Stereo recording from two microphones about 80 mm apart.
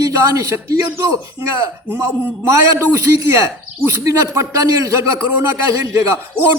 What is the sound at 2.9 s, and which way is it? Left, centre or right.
Speech, right.